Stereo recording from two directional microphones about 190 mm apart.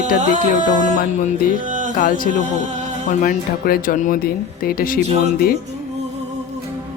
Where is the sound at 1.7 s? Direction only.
40° right (ahead or behind).